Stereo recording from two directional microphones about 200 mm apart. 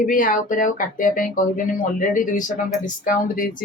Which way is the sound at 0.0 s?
40° left (ahead or behind).